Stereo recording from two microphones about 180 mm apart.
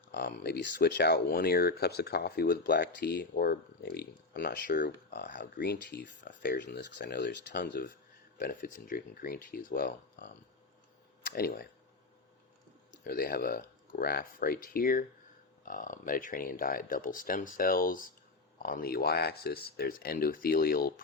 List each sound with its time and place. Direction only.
0.1 s speech: 70° left (ahead or behind)
8.4 s speech: 55° left (ahead or behind)
11.3 s speech: 55° left (ahead or behind)
13.1 s speech: 55° left (ahead or behind)